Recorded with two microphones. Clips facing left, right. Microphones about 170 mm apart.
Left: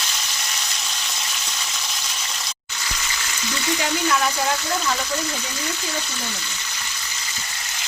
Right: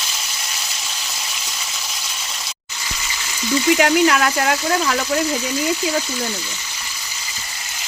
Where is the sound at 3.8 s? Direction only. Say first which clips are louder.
Right 4 dB; 75° right (ahead or behind).